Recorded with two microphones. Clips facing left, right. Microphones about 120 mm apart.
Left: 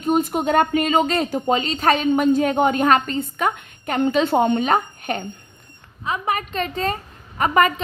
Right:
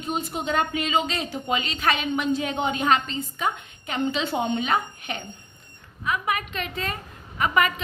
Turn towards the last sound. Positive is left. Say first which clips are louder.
# left 5 dB
turn(degrees=40)  # may be behind; listen again after turning